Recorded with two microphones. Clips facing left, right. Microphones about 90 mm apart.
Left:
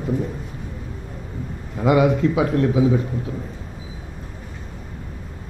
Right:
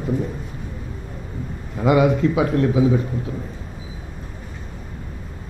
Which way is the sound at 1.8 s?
20° right (ahead or behind).